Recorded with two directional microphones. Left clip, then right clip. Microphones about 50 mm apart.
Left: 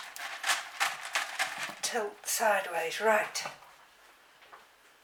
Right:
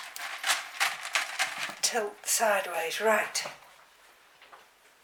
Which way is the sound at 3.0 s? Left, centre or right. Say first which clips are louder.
Right 1 dB; right.